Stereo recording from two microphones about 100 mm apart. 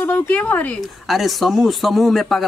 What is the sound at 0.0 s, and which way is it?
Speech, 15° left (ahead or behind).